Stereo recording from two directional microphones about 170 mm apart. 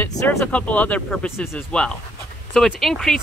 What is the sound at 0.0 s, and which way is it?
Speech, 15° left (ahead or behind).